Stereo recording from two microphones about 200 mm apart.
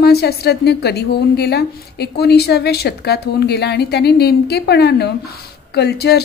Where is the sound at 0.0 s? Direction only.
55° left (ahead or behind).